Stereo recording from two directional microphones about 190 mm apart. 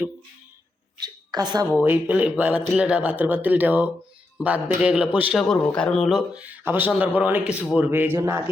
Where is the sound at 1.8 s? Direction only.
10° right (ahead or behind).